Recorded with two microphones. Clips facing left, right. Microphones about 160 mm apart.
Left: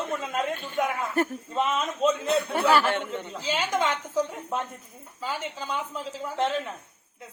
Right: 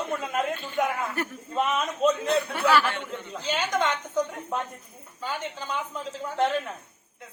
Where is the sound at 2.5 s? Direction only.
40° left (ahead or behind).